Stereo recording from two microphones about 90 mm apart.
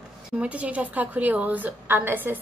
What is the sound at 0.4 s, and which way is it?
A woman's voice, 15° right (ahead or behind).